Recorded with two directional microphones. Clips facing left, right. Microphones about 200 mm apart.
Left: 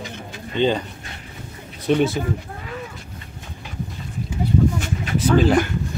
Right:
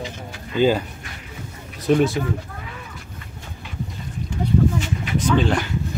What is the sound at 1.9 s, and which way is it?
Speech, centre (ahead or behind).